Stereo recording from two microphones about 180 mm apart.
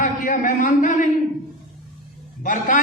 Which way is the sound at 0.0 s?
45° left (ahead or behind).